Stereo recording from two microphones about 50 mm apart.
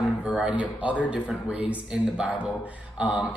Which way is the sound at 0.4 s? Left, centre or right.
Right.